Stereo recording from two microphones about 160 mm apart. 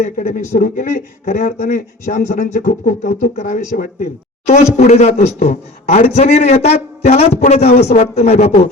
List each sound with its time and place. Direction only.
0.2 s speech: 55° left (ahead or behind)